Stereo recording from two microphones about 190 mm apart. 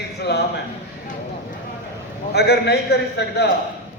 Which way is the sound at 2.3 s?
60° left (ahead or behind).